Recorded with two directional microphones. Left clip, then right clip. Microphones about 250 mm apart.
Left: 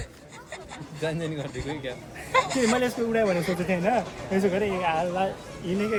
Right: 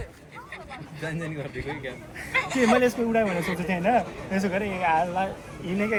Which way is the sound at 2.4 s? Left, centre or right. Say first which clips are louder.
Right 3 dB; centre.